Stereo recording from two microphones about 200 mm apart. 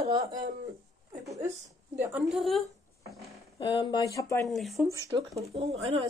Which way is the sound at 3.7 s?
20° left (ahead or behind).